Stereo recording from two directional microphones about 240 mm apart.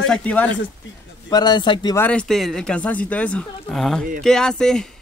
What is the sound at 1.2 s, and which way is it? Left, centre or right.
Speech, centre.